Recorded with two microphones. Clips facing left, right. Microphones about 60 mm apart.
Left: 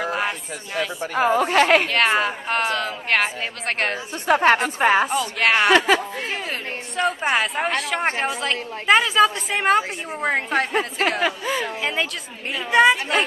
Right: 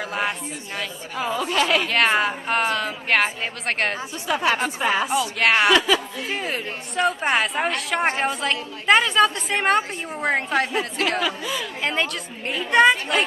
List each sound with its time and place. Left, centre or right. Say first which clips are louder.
0.0 s a sound: left 2 dB; centre
1.1 s a woman's voice: left 6 dB; left
1.9 s a woman's voice: even; centre
4.3 s a woman's voice: left 5 dB; left
5.1 s a woman's voice: even; centre
5.7 s speech: left 2 dB; left
6.2 s a woman's voice: right 1 dB; centre
11.2 s speech: left 3 dB; left
11.8 s a woman's voice: even; centre